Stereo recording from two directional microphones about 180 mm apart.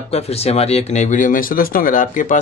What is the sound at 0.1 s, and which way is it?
Speech, 35° left (ahead or behind).